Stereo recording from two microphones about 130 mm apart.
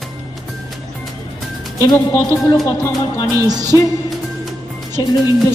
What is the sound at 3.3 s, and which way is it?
Music, 30° right (ahead or behind).